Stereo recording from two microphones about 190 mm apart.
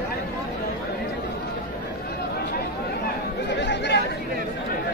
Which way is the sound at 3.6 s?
65° left (ahead or behind).